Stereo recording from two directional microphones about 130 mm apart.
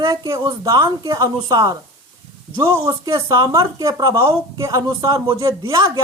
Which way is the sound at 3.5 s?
25° right (ahead or behind).